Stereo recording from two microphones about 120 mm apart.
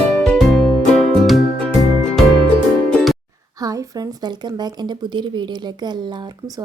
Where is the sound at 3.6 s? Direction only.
30° right (ahead or behind).